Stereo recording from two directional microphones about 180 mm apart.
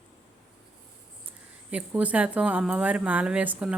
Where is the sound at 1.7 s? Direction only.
10° right (ahead or behind).